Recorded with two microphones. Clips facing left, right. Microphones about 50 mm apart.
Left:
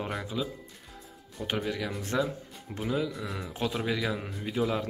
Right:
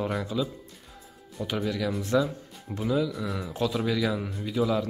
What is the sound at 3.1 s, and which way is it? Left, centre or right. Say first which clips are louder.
Speech: right 4 dB; centre.